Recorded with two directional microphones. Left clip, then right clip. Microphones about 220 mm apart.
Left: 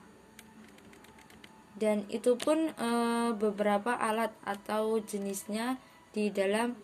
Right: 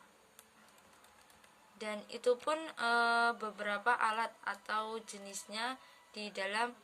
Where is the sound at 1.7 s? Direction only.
5° right (ahead or behind).